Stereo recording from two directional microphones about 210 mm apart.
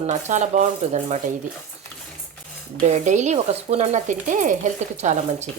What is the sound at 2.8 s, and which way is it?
Speech, 35° right (ahead or behind).